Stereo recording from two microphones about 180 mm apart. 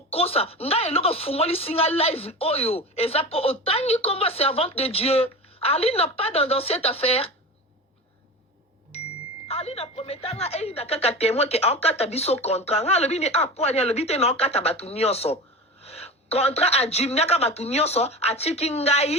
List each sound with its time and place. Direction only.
0.1 s speech: 35° left (ahead or behind)
9.5 s speech: 35° left (ahead or behind)